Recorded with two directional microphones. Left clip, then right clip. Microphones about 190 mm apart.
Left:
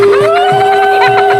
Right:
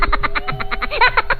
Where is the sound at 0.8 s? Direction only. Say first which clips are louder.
Left 9 dB; centre (ahead or behind).